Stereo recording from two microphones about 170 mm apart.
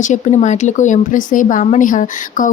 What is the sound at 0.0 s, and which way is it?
Speech, 45° left (ahead or behind).